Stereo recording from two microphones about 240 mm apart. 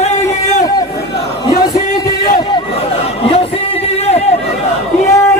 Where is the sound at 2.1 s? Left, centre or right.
Left.